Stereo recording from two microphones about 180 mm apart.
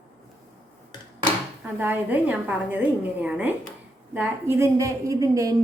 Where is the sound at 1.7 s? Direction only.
10° right (ahead or behind).